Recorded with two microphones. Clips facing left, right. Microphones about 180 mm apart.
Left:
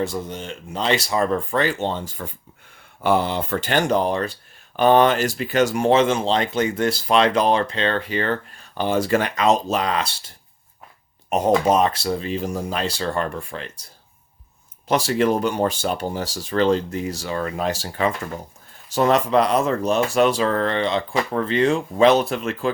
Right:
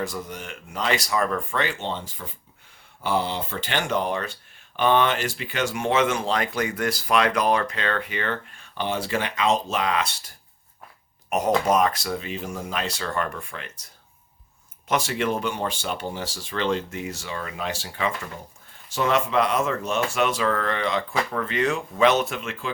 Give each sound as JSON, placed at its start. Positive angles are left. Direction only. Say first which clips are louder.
{"t": 0.0, "sound": "speech", "louder": "left 5 dB", "side_deg": 25}
{"t": 14.8, "sound": "speech", "louder": "left 5 dB", "side_deg": 35}